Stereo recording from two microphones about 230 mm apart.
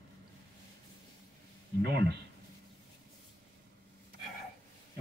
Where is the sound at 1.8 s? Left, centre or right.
Right.